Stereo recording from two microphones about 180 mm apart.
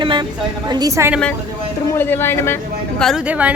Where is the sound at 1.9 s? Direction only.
10° left (ahead or behind).